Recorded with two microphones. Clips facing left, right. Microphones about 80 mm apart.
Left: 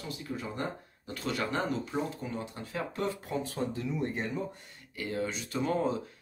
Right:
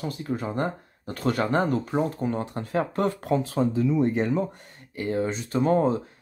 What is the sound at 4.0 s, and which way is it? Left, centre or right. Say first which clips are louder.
Speech: right 10 dB; right.